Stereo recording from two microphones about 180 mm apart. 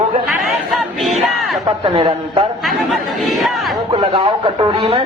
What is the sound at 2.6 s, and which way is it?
Speech, centre (ahead or behind).